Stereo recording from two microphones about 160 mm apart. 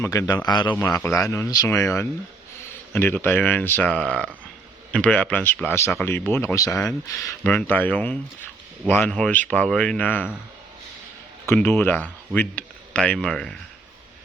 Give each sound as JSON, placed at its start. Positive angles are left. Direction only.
{"t": 0.0, "sound": "speech", "side_deg": 20}
{"t": 0.7, "sound": "speech", "side_deg": 15}
{"t": 11.4, "sound": "speech", "side_deg": 15}